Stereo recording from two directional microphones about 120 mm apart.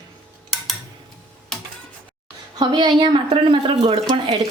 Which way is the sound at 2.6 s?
40° right (ahead or behind).